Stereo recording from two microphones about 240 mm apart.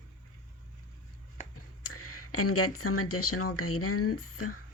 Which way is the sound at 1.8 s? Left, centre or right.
Left.